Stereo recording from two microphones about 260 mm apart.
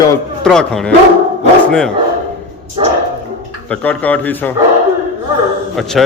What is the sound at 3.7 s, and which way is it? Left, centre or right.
Speech, centre.